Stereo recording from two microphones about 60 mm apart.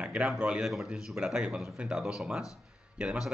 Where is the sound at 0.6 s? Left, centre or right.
Centre.